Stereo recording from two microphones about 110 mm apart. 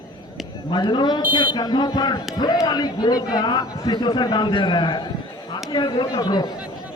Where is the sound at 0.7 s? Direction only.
45° left (ahead or behind).